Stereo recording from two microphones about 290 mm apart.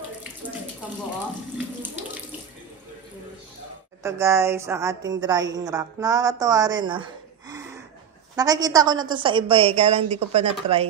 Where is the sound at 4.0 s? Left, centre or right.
Centre.